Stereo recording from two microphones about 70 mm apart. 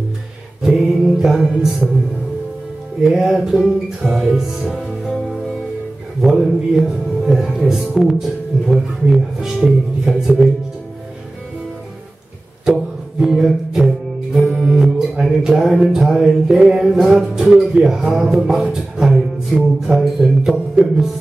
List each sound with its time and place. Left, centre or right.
0.6 s music: centre
3.0 s speech: centre
6.2 s speech: centre
12.6 s music: centre
20.5 s music: centre